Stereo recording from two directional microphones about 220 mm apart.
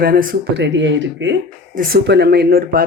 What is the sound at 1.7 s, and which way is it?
Speech, 40° right (ahead or behind).